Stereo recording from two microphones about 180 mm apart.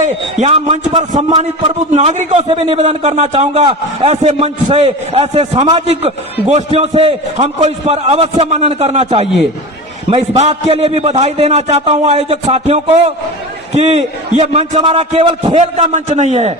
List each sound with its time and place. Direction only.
0.0 s a man's voice: 40° right (ahead or behind)